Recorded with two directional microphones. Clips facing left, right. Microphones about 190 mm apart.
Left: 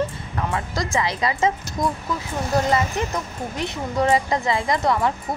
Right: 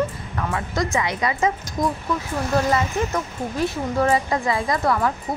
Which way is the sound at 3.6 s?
20° left (ahead or behind).